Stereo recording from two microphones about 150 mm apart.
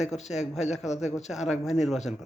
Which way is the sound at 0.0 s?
50° left (ahead or behind).